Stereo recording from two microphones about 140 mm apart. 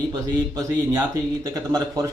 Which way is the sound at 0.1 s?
30° right (ahead or behind).